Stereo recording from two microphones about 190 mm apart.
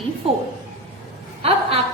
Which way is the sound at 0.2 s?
30° right (ahead or behind).